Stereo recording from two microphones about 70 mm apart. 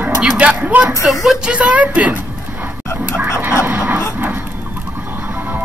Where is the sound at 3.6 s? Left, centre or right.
Right.